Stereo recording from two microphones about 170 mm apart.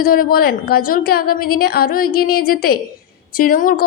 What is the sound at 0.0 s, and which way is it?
A woman's voice, 60° left (ahead or behind).